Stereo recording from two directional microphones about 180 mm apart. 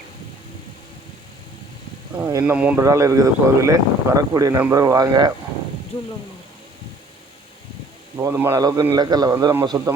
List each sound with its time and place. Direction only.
2.1 s a man's voice: 10° right (ahead or behind)
8.2 s a man's voice: 15° right (ahead or behind)